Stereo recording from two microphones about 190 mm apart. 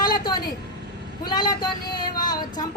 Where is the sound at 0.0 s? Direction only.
20° left (ahead or behind).